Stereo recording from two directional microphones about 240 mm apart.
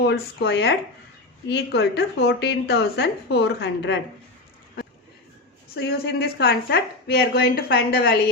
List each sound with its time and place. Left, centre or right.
0.0 s speech: left
5.7 s speech: left